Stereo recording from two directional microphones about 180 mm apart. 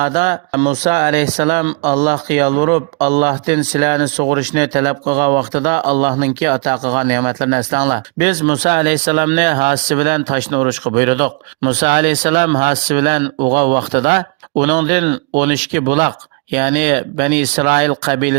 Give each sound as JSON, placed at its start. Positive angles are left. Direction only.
{"t": 0.0, "sound": "speech", "side_deg": -45}